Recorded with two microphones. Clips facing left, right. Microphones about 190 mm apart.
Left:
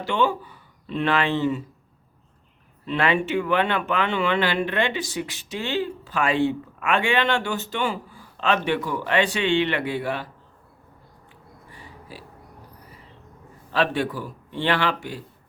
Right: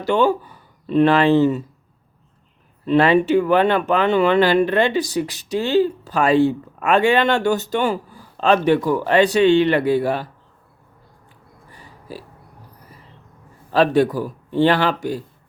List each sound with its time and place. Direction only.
0.0 s speech: 40° right (ahead or behind)
2.8 s speech: 40° right (ahead or behind)
11.7 s a sound: 40° right (ahead or behind)
13.7 s speech: 40° right (ahead or behind)